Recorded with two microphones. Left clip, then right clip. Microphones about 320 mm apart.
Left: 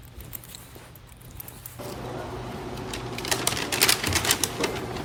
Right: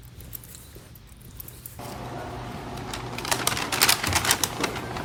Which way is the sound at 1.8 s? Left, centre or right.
Centre.